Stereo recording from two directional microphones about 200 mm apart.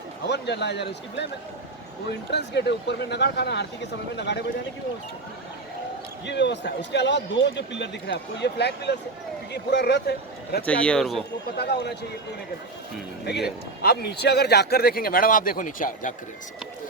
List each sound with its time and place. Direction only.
0.3 s speech: 55° left (ahead or behind)
2.3 s speech: 60° left (ahead or behind)
6.2 s speech: 60° left (ahead or behind)
10.7 s speech: 5° left (ahead or behind)
11.5 s speech: 55° left (ahead or behind)
13.3 s speech: 55° left (ahead or behind); by 16.1 s 40° left (ahead or behind)